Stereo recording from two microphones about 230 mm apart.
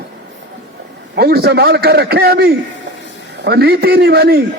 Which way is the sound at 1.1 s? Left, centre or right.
Right.